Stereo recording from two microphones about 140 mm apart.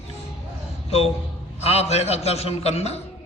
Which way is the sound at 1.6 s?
50° left (ahead or behind).